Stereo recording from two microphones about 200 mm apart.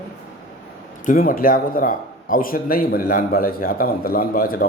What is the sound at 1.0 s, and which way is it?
A man's voice, 45° left (ahead or behind).